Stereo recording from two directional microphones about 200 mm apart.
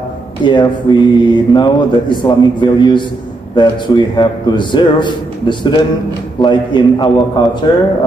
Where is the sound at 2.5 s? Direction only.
25° left (ahead or behind).